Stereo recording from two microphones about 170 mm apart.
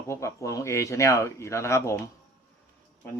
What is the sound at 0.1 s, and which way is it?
Speech, 15° left (ahead or behind).